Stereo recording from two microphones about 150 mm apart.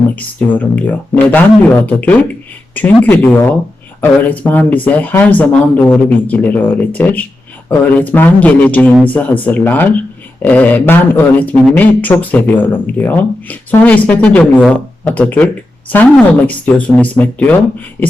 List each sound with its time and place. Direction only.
0.2 s a man's voice: 10° left (ahead or behind)